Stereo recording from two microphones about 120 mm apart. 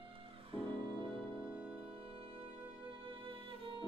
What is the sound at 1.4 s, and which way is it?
Music, 10° right (ahead or behind).